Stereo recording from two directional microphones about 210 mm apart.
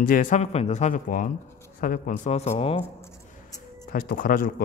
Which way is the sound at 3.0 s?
10° left (ahead or behind).